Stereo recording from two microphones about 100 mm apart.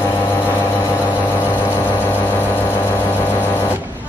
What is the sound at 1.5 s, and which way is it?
Music, 20° left (ahead or behind).